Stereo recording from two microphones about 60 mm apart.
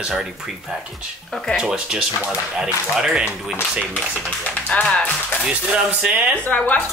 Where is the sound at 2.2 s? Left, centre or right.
Centre.